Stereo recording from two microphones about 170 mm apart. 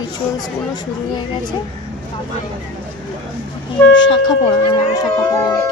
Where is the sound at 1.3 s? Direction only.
25° left (ahead or behind).